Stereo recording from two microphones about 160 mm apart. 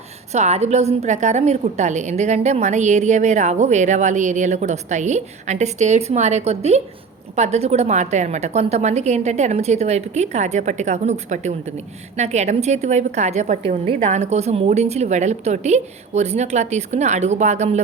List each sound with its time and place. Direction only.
0.3 s a woman's voice: 45° right (ahead or behind)